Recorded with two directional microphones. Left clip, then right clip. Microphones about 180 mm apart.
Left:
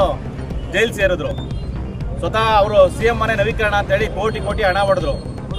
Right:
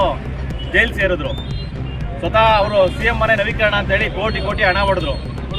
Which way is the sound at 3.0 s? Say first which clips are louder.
Right 1 dB; 20° left (ahead or behind).